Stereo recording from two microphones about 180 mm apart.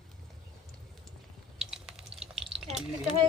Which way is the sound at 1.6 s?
Centre (ahead or behind).